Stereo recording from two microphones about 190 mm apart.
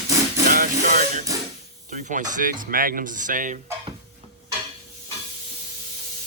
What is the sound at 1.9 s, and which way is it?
Speech, 40° right (ahead or behind).